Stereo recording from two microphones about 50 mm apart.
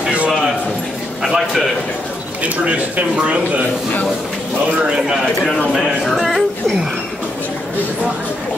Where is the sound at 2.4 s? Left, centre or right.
Right.